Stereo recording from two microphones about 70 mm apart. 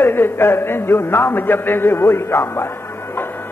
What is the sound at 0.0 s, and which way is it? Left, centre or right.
A man's voice, left.